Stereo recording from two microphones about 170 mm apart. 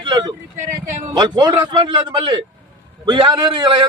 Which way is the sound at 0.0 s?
25° right (ahead or behind).